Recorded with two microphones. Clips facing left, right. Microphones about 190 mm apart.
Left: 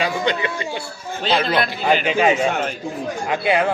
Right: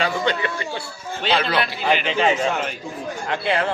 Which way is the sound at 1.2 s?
40° left (ahead or behind).